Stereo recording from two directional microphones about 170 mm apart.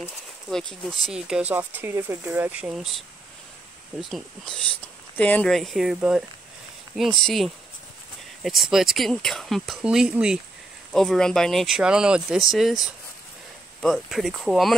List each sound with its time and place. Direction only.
0.5 s speech: 5° left (ahead or behind)
4.0 s speech: centre (ahead or behind)